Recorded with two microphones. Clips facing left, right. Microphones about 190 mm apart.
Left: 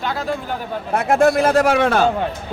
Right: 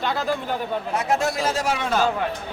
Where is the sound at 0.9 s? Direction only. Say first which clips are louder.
Left 10 dB; 55° left (ahead or behind).